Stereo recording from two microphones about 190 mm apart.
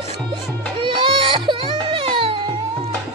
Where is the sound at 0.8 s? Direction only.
25° right (ahead or behind).